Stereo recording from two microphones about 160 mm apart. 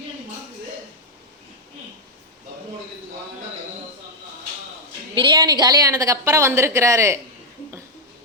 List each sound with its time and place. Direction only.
5.1 s a woman's voice: 30° right (ahead or behind)